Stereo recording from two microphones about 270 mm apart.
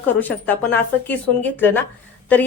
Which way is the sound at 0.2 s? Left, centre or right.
Centre.